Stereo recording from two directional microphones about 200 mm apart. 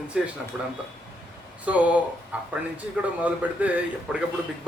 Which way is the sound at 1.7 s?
5° right (ahead or behind).